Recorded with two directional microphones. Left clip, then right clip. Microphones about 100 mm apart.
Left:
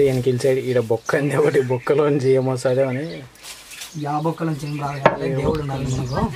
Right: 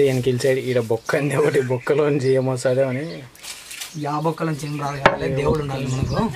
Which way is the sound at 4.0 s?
40° right (ahead or behind).